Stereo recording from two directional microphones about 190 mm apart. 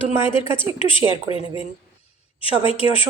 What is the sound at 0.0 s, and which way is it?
A woman's voice, 25° left (ahead or behind).